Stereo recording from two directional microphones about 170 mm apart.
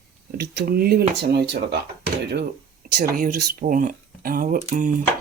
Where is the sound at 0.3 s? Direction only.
65° right (ahead or behind).